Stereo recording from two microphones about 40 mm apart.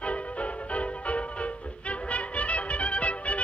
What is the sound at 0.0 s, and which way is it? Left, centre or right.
Music, left.